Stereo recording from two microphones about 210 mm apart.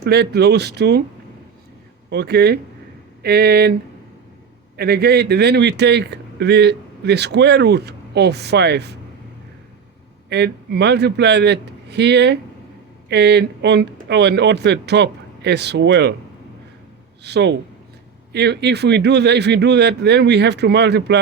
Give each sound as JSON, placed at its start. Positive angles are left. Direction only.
{"t": 0.0, "sound": "a man's voice", "side_deg": -50}
{"t": 2.0, "sound": "a man's voice", "side_deg": -50}
{"t": 4.8, "sound": "a man's voice", "side_deg": -50}
{"t": 10.2, "sound": "a man's voice", "side_deg": -55}
{"t": 17.2, "sound": "a man's voice", "side_deg": -55}